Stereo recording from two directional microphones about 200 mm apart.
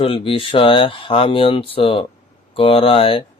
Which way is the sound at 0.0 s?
25° left (ahead or behind).